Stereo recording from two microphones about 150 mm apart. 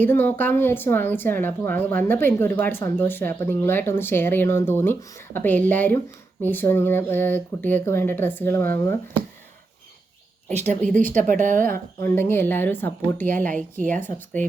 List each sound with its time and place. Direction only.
0.0 s speech: 15° left (ahead or behind)
11.1 s a woman's voice: 60° right (ahead or behind)
11.9 s speech: 15° left (ahead or behind)
13.5 s a woman's voice: 60° right (ahead or behind)
14.0 s speech: 15° left (ahead or behind)